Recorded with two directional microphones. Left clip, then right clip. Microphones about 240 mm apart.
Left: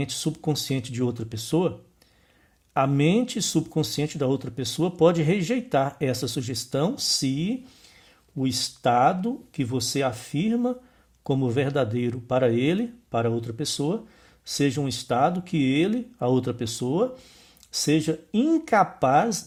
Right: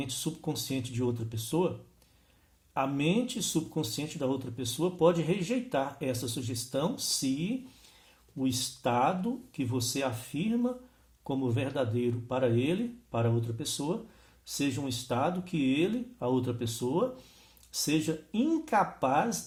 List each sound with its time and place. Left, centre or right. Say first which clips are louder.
0.0 s speech: left 7 dB; left
2.7 s speech: left 7 dB; left